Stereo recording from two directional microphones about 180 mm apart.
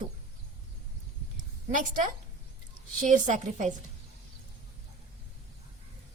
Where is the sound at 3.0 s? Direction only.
45° right (ahead or behind).